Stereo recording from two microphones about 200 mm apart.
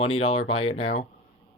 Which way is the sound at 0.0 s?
30° left (ahead or behind).